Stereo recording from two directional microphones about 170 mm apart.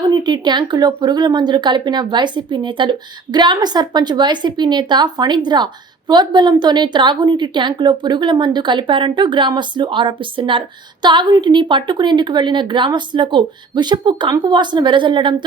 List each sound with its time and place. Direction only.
0.1 s a woman's voice: 25° right (ahead or behind)